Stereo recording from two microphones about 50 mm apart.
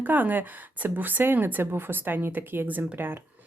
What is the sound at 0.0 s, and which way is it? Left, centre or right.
A woman's voice, right.